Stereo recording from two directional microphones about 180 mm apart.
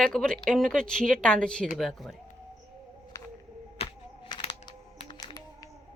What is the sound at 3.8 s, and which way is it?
Music, 30° left (ahead or behind).